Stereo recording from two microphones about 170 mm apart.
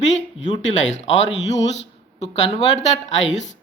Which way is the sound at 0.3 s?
90° left.